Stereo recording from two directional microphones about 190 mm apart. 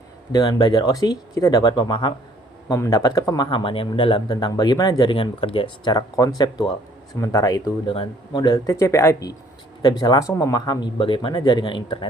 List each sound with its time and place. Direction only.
0.3 s speech: 20° left (ahead or behind)